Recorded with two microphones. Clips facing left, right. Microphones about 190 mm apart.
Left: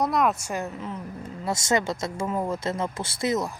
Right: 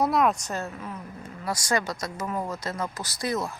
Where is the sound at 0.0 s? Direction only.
Centre (ahead or behind).